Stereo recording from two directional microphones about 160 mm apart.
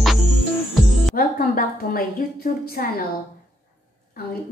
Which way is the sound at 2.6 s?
65° left (ahead or behind).